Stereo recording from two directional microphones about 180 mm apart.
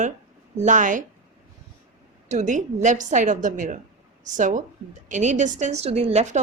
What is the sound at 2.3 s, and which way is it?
A woman's voice, 40° right (ahead or behind).